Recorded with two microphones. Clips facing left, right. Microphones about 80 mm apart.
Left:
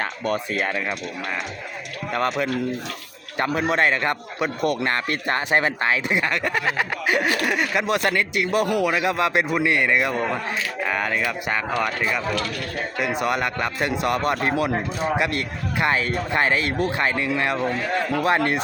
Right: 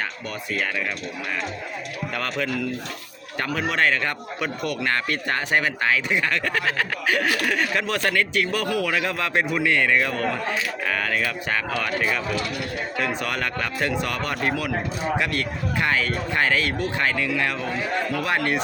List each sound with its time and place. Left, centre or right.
0.6 s a man's voice: left
3.3 s a man's voice: left
13.0 s a man's voice: centre